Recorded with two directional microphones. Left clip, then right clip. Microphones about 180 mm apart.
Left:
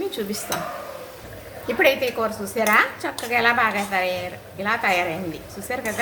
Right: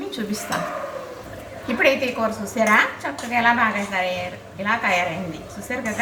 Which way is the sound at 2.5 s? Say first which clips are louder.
Right 1 dB; 15° left (ahead or behind).